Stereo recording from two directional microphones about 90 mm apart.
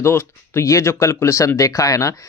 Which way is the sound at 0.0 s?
30° left (ahead or behind).